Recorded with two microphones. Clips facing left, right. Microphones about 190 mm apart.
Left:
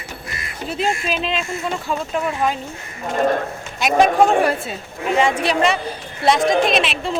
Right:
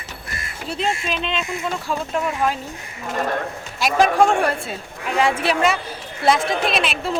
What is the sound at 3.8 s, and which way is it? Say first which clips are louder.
A woman's voice: left 2 dB; centre (ahead or behind).